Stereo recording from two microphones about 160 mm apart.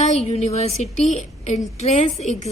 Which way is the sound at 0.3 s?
40° left (ahead or behind).